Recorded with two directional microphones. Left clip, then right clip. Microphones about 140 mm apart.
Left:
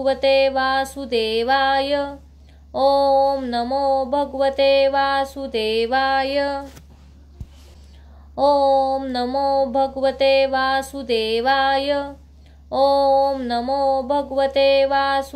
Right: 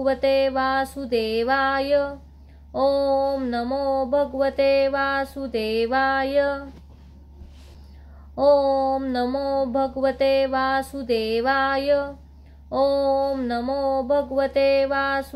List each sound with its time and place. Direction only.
0.0 s mantra: 20° left (ahead or behind)
8.4 s mantra: 20° left (ahead or behind)